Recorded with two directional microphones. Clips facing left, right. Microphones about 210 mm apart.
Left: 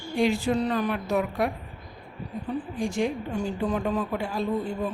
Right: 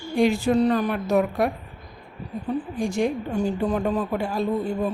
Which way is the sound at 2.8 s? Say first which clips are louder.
Right 2 dB; 45° right (ahead or behind).